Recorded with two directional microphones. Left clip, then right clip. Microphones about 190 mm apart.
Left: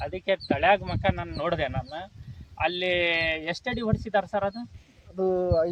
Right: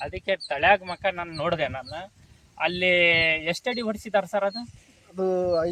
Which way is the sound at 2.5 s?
15° right (ahead or behind).